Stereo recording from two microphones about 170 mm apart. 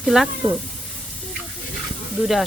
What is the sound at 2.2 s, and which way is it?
Speech, centre (ahead or behind).